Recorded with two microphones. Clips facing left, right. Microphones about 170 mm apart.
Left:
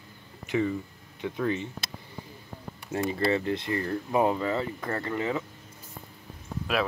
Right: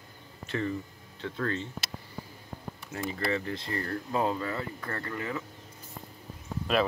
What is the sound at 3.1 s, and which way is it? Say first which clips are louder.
Speech: left 5 dB; 20° left (ahead or behind).